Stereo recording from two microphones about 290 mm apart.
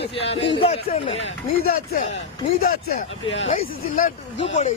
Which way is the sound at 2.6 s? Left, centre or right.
Left.